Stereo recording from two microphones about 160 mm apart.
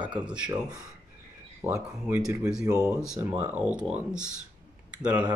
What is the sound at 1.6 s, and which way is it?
Speech, 15° right (ahead or behind).